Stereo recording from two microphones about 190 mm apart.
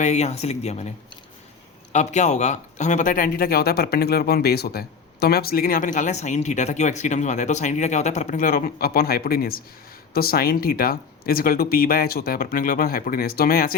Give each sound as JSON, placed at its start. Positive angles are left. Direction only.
{"t": 0.0, "sound": "speech", "side_deg": 35}
{"t": 1.9, "sound": "speech", "side_deg": 35}